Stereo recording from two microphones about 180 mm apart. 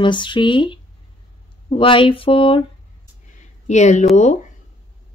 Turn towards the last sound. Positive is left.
turn(degrees=40)  # may be behind; listen again after turning